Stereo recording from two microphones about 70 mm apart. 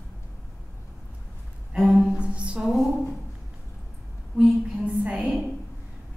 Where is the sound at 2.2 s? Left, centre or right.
Centre.